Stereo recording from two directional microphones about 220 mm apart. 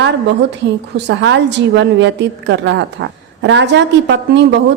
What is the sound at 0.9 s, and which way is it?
A woman's voice, 55° right (ahead or behind).